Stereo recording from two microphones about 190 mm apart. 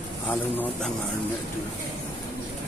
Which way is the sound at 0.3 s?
10° left (ahead or behind).